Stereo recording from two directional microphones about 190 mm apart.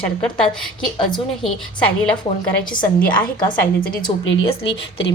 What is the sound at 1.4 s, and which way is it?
Speech, 5° left (ahead or behind).